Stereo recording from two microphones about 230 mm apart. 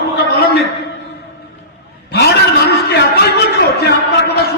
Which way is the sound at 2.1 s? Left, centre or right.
Left.